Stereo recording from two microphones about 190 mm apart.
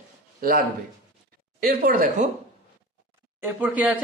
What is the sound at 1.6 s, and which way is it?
Speech, 50° right (ahead or behind).